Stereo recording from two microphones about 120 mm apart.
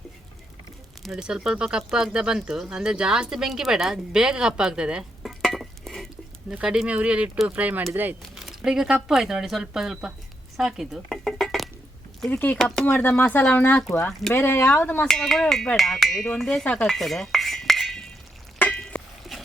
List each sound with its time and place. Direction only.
1.0 s speech: 5° right (ahead or behind)
8.4 s a sound: 5° right (ahead or behind)
9.0 s speech: 5° right (ahead or behind)
10.6 s dishes: 5° right (ahead or behind)
12.3 s speech: 15° left (ahead or behind)
15.0 s speech: 5° left (ahead or behind)
16.7 s cutlery: centre (ahead or behind)
18.6 s a sound: 10° left (ahead or behind)